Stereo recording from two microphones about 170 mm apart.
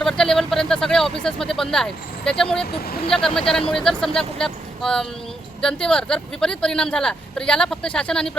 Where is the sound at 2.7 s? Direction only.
65° left (ahead or behind).